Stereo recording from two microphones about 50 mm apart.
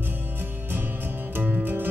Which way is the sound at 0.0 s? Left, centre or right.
Right.